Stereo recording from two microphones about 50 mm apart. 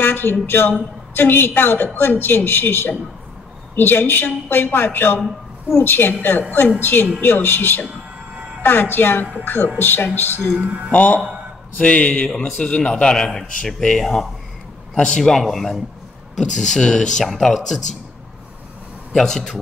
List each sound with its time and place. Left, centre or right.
0.0 s speech: left
10.6 s speech: right
10.9 s a man's voice: left
13.1 s speech: centre
15.4 s speech: centre
17.3 s speech: centre
19.1 s speech: centre